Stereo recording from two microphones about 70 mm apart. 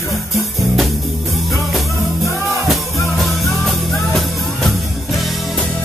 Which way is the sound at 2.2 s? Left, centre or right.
Right.